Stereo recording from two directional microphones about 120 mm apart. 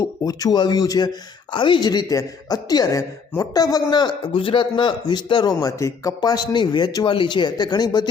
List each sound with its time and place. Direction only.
0.0 s speech: 30° left (ahead or behind)